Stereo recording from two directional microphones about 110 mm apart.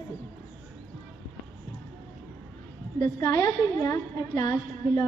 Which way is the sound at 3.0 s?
25° left (ahead or behind).